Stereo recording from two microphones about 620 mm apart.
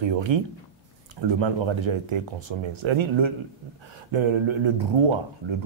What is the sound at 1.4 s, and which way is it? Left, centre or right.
Speech, right.